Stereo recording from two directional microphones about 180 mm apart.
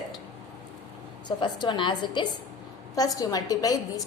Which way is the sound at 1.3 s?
25° left (ahead or behind).